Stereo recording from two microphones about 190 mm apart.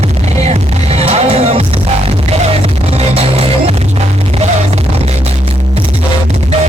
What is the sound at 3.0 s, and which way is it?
Music, 30° right (ahead or behind).